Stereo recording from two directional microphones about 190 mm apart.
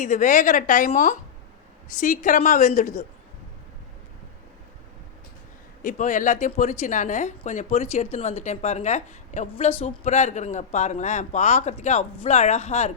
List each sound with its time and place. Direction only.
0.0 s a woman's voice: 40° left (ahead or behind)
5.8 s a woman's voice: 40° left (ahead or behind)